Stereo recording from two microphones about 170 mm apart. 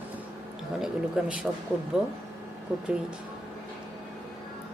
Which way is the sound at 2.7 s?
5° right (ahead or behind).